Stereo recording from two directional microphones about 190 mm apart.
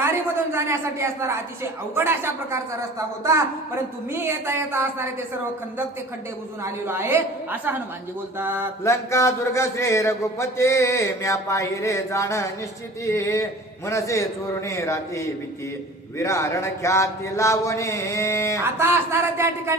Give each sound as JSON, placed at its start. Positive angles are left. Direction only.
{"t": 0.0, "sound": "a sound", "side_deg": -15}
{"t": 2.0, "sound": "a woman's voice", "side_deg": -10}
{"t": 4.1, "sound": "a woman's voice", "side_deg": -10}
{"t": 6.6, "sound": "a woman's voice", "side_deg": -15}
{"t": 8.8, "sound": "speech", "side_deg": 15}
{"t": 18.6, "sound": "a woman's voice", "side_deg": -15}